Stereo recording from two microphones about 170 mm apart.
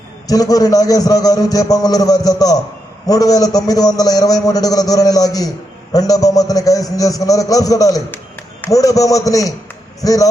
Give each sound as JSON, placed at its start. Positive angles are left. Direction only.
{"t": 0.3, "sound": "a man's voice", "side_deg": 20}